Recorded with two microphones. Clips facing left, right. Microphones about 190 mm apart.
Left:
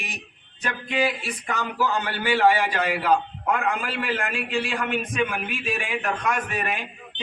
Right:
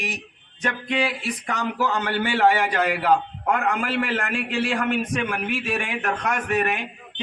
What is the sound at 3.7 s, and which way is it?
A man's voice, 60° right (ahead or behind).